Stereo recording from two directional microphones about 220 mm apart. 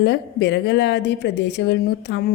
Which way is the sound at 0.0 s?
50° left (ahead or behind).